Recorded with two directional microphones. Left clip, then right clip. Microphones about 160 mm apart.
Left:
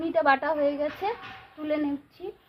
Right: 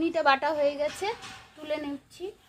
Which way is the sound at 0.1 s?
40° right (ahead or behind).